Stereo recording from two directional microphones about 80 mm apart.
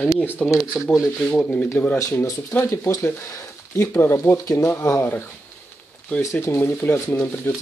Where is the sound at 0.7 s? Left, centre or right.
Centre.